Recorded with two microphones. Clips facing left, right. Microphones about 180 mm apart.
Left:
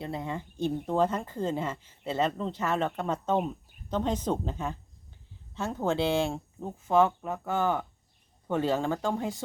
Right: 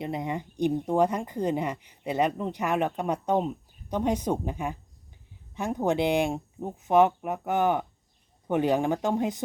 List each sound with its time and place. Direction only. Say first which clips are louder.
0.0 s speech: right 3 dB; 15° right (ahead or behind)